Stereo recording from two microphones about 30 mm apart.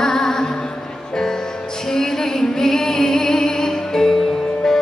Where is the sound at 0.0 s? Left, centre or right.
Centre.